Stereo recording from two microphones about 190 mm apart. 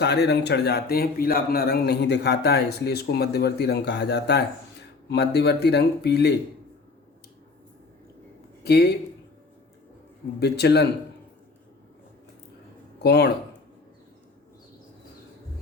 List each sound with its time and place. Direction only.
0.0 s speech: 60° left (ahead or behind)
8.6 s speech: 60° left (ahead or behind)
10.4 s speech: 60° left (ahead or behind)
13.0 s speech: 60° left (ahead or behind)